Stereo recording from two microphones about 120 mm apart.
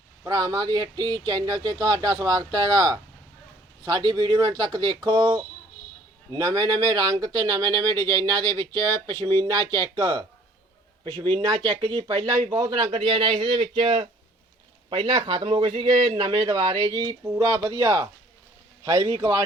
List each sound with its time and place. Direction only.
0.3 s a man's voice: 30° right (ahead or behind)